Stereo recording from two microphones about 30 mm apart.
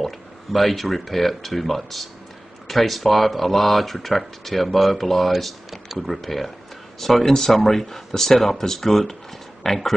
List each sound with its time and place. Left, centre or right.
0.0 s speech: centre